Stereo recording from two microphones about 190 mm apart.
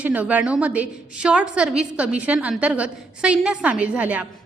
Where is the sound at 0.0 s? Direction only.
10° right (ahead or behind).